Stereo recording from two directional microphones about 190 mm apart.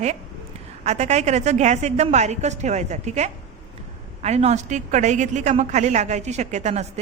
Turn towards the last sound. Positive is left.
turn(degrees=-35)  # may be behind; listen again after turning